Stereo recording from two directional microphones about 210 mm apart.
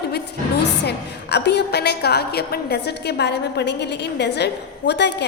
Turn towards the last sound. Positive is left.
turn(degrees=55)  # may be behind; listen again after turning